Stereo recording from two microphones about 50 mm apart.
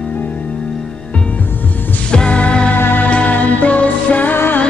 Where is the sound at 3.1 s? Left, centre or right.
Left.